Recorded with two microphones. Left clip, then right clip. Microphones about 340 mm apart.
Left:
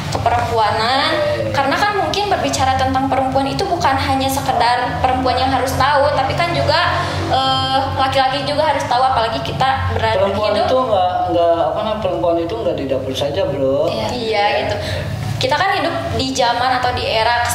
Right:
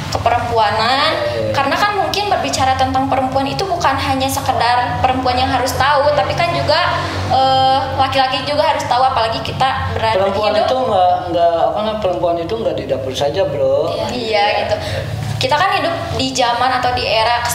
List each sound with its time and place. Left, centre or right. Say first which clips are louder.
0.2 s a woman's voice: right 1 dB; centre
10.7 s speech: right 2 dB; right
15.5 s a woman's voice: right 2 dB; centre